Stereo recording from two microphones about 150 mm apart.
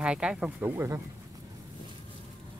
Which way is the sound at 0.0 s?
5° right (ahead or behind).